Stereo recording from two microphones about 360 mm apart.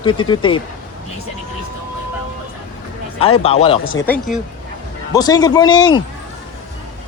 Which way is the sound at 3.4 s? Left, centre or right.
Centre.